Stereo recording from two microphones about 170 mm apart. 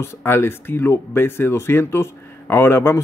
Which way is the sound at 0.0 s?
15° left (ahead or behind).